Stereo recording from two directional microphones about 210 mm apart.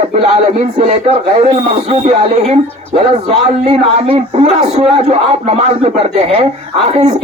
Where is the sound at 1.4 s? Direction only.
30° right (ahead or behind).